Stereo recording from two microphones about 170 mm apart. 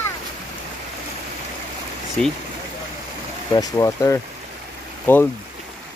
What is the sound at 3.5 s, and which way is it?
Speech, 20° left (ahead or behind).